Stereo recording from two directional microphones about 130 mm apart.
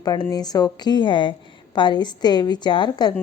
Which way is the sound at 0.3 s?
30° left (ahead or behind).